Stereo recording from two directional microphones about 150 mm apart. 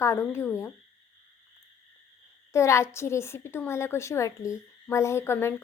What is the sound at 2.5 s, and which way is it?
A woman's voice, 20° left (ahead or behind).